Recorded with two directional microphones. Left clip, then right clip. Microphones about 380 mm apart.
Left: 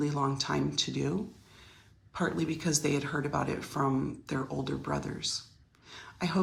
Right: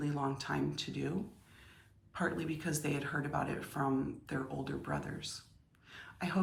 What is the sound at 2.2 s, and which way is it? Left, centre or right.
Speech, centre.